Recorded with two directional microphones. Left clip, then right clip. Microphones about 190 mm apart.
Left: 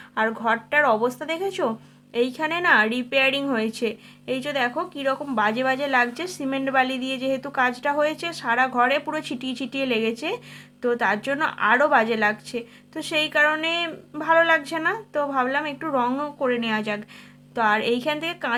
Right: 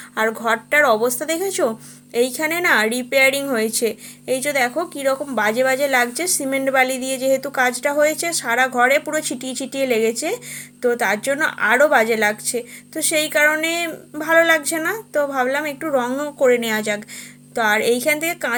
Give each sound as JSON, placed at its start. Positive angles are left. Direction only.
{"t": 0.1, "sound": "a woman's voice", "side_deg": -20}